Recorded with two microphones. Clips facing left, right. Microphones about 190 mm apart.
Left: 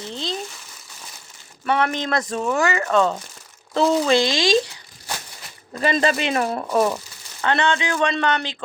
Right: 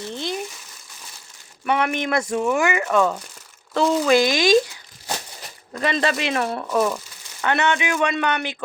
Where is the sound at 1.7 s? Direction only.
15° right (ahead or behind).